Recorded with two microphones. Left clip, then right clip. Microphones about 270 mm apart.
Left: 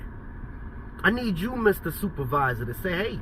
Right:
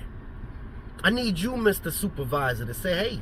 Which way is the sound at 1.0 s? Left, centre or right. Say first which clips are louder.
Even; centre.